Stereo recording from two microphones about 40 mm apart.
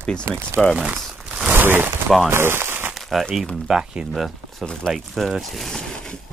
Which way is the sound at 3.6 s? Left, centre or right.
Centre.